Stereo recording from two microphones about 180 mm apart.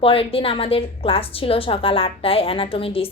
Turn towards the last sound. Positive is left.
turn(degrees=30)  # may be behind; listen again after turning